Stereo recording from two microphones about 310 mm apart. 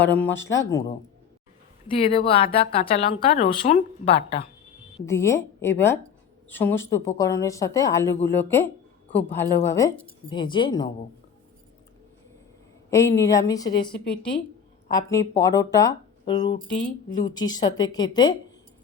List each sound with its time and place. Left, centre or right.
0.0 s speech: centre
2.0 s speech: centre
12.9 s speech: centre